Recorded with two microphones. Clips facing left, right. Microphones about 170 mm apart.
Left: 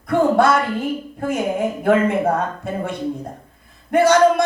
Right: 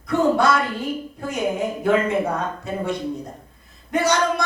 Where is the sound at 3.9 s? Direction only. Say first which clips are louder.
Left 7 dB; 55° left (ahead or behind).